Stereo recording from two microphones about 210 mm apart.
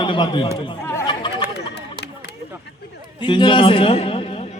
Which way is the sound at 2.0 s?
55° left (ahead or behind).